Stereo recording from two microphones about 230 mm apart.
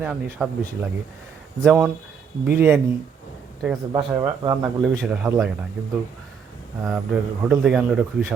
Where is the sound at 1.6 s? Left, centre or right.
Centre.